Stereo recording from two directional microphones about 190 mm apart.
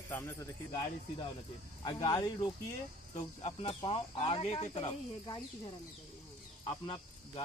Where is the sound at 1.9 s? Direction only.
25° left (ahead or behind).